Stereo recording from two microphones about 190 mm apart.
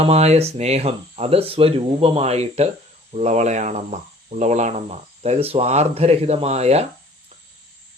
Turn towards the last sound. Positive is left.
turn(degrees=-35)  # may be behind; listen again after turning